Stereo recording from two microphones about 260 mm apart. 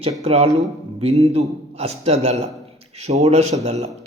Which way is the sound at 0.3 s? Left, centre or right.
Right.